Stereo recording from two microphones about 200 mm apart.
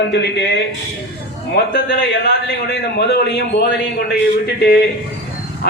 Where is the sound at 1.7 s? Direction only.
55° left (ahead or behind).